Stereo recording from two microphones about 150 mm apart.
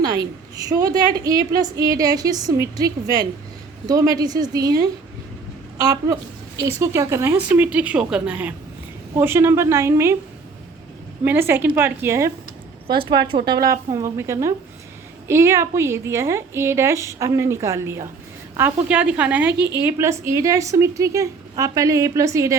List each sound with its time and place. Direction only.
0.7 s a woman's voice: 25° right (ahead or behind)
11.3 s speech: 15° right (ahead or behind)
13.1 s a woman's voice: 35° right (ahead or behind)
13.5 s a woman's voice: 25° right (ahead or behind)